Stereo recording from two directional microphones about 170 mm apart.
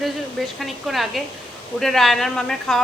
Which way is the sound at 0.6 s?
Centre (ahead or behind).